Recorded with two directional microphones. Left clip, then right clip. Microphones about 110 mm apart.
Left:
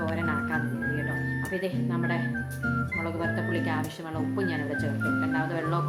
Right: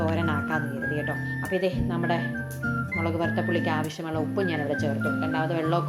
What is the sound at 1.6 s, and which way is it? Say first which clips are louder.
Speech: right 3 dB; 25° right (ahead or behind).